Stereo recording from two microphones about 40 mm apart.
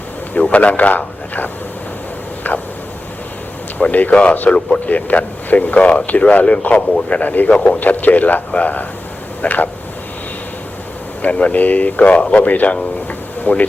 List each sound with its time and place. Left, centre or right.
0.5 s speech: left
2.5 s a sound: left
3.8 s speech: left
4.1 s a man's voice: left
4.9 s speech: left
7.8 s a man's voice: left
11.2 s speech: left